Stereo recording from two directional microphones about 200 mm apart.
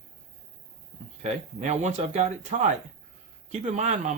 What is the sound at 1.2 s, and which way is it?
Speech, 35° right (ahead or behind).